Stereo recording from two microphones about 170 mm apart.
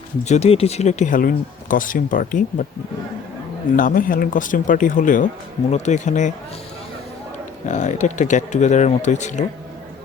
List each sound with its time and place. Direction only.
0.3 s speech: 40° left (ahead or behind)
3.8 s speech: 55° left (ahead or behind)
7.7 s speech: 45° left (ahead or behind)